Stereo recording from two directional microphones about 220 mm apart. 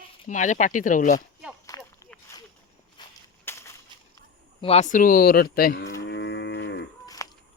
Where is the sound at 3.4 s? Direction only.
10° left (ahead or behind).